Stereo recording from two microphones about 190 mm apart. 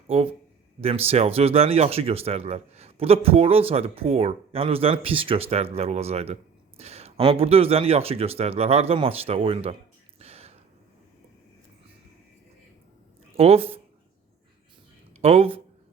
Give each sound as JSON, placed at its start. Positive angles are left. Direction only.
{"t": 0.1, "sound": "speech", "side_deg": -35}
{"t": 10.2, "sound": "a sound", "side_deg": -30}
{"t": 13.3, "sound": "speech", "side_deg": -30}
{"t": 15.2, "sound": "speech", "side_deg": -30}